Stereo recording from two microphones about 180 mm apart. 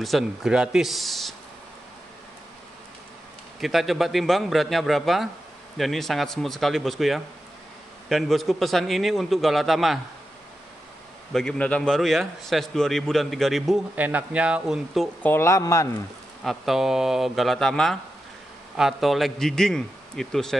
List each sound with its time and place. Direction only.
0.0 s a man's voice: centre (ahead or behind)
3.6 s a man's voice: centre (ahead or behind)
11.3 s a man's voice: 5° left (ahead or behind)
15.2 s speech: 15° left (ahead or behind)
16.4 s a man's voice: centre (ahead or behind)